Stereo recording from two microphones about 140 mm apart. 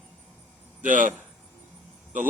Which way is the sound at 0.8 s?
65° right (ahead or behind).